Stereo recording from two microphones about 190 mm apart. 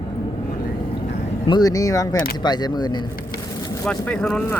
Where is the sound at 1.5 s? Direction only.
20° left (ahead or behind).